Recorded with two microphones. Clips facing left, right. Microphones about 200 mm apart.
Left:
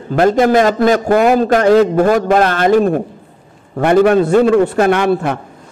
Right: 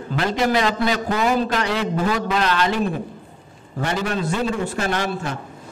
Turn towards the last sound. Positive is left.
turn(degrees=60)  # may be behind; listen again after turning